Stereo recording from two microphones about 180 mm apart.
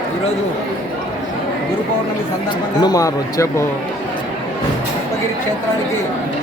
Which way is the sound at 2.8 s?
20° left (ahead or behind).